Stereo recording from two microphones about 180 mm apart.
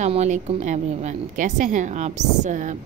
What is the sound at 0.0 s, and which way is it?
A woman's voice, 40° right (ahead or behind).